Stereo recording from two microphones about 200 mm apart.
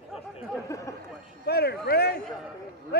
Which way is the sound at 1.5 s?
50° left (ahead or behind).